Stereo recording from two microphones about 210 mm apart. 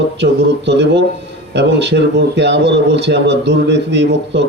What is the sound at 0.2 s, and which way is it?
Speech, 55° right (ahead or behind).